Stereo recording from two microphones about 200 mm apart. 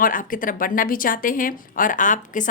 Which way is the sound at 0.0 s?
45° left (ahead or behind).